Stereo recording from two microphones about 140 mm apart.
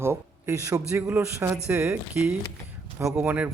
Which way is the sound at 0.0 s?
20° right (ahead or behind).